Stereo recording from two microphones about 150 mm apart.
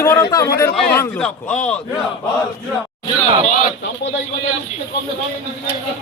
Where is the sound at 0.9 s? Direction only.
10° left (ahead or behind).